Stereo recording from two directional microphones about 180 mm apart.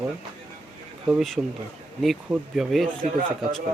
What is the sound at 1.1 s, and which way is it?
Speech, centre (ahead or behind).